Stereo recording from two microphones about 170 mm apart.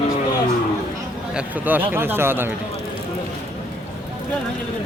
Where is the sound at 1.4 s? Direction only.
10° right (ahead or behind).